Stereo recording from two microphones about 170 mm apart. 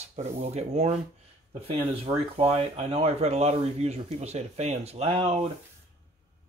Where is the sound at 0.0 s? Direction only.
40° right (ahead or behind).